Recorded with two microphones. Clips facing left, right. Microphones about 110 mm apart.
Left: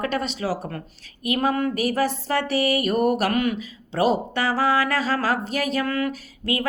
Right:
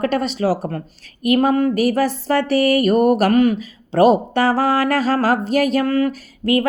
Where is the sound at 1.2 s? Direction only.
45° right (ahead or behind).